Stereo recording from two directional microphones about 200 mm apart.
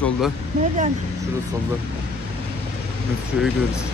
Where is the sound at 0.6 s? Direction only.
35° right (ahead or behind).